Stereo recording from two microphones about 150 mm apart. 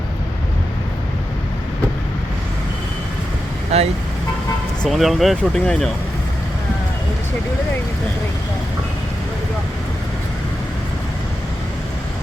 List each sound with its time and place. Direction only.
3.7 s speech: 45° right (ahead or behind)
4.8 s speech: centre (ahead or behind)